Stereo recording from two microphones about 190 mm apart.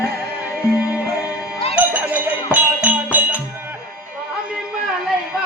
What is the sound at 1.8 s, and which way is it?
Music, 10° right (ahead or behind).